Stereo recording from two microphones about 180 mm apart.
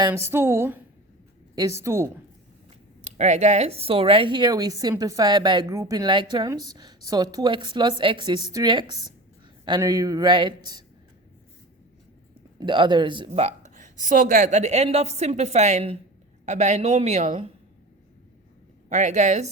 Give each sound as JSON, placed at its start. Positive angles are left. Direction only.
{"t": 0.0, "sound": "a woman's voice", "side_deg": -15}
{"t": 3.0, "sound": "speech", "side_deg": -40}
{"t": 12.5, "sound": "speech", "side_deg": -25}
{"t": 18.9, "sound": "speech", "side_deg": -40}